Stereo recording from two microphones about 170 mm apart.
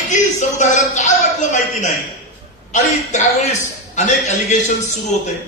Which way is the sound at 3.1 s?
45° left (ahead or behind).